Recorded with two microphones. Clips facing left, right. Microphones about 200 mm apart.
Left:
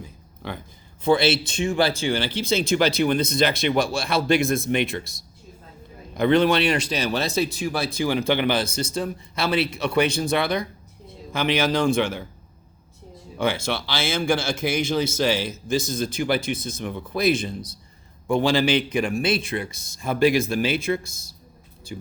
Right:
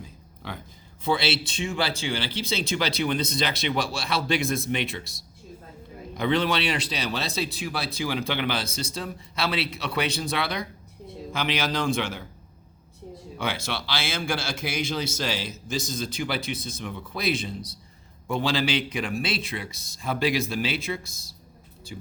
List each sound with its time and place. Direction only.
0.4 s speech: 50° left (ahead or behind)
6.1 s speech: 50° left (ahead or behind)
13.4 s speech: 50° left (ahead or behind)